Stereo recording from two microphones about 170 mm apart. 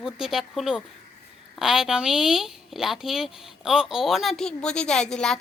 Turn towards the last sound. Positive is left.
turn(degrees=5)  # may be behind; listen again after turning